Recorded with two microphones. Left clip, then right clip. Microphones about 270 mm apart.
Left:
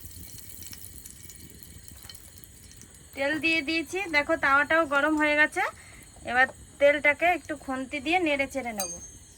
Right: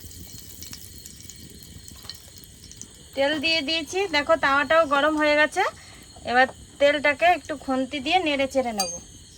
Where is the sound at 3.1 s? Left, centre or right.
Right.